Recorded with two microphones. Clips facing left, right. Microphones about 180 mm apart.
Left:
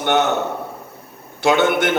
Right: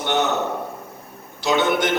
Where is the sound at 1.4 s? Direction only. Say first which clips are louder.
Left 3 dB; 55° left (ahead or behind).